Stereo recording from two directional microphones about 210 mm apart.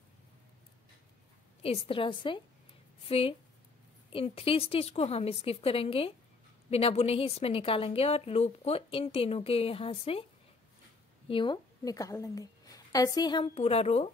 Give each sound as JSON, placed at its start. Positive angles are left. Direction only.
{"t": 1.6, "sound": "a woman's voice", "side_deg": 25}
{"t": 11.2, "sound": "a woman's voice", "side_deg": 25}